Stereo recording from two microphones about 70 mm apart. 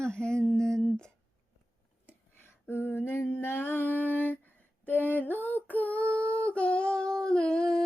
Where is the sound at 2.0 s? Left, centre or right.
Left.